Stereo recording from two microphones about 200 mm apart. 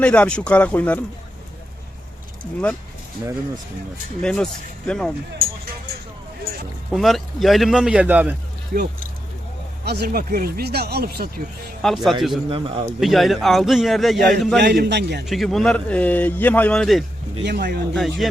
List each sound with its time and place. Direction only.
0.0 s speech: 5° left (ahead or behind)
4.2 s a man's voice: 5° left (ahead or behind)
6.9 s a man's voice: centre (ahead or behind)
8.7 s speech: 45° right (ahead or behind)
11.8 s a man's voice: centre (ahead or behind)
12.5 s speech: 25° right (ahead or behind)
13.0 s a man's voice: centre (ahead or behind)
14.6 s a man's voice: 55° right (ahead or behind)
15.3 s speech: centre (ahead or behind)
17.4 s speech: 55° right (ahead or behind)
17.9 s a man's voice: centre (ahead or behind)